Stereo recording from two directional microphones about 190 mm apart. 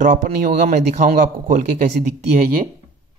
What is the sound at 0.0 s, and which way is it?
A man's voice, 45° right (ahead or behind).